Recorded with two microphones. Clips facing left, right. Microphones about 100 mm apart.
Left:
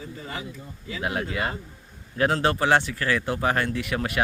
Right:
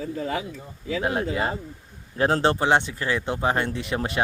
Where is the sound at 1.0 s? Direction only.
30° right (ahead or behind).